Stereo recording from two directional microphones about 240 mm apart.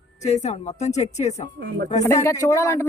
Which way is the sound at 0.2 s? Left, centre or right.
Left.